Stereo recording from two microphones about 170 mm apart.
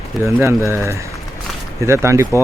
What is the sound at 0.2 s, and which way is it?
Speech, 15° right (ahead or behind).